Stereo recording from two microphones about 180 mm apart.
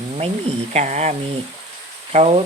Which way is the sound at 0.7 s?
40° right (ahead or behind).